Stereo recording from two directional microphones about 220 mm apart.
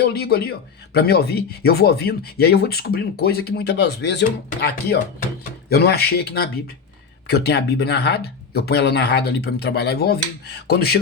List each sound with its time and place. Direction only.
0.0 s speech: 45° left (ahead or behind)